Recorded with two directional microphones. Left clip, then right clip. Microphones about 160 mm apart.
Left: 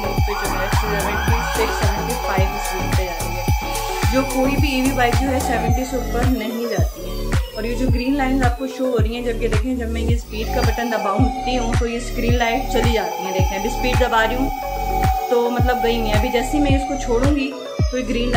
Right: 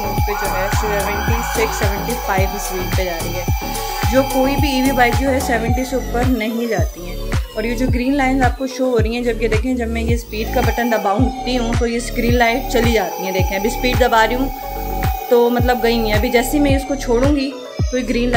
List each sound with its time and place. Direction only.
4.1 s music: 35° right (ahead or behind)
8.9 s music: 40° right (ahead or behind)
17.9 s music: 40° right (ahead or behind)